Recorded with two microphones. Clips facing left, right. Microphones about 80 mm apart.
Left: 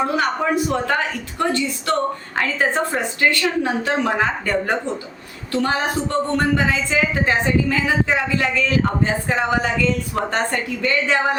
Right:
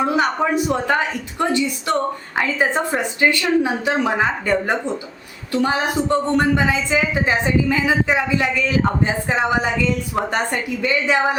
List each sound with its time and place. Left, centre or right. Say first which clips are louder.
0.0 s a woman's voice: right 2 dB; centre